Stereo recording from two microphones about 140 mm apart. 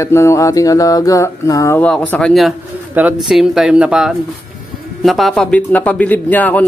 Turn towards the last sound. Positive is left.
turn(degrees=10)  # may be behind; listen again after turning